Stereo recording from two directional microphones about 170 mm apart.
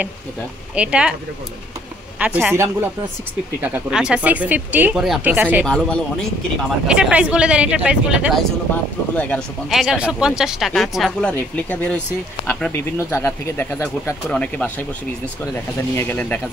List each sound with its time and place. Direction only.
0.7 s speech: 5° right (ahead or behind)
2.1 s speech: 10° right (ahead or behind)
5.7 s speech: 5° left (ahead or behind)
6.9 s speech: 5° right (ahead or behind)
9.1 s speech: 10° left (ahead or behind)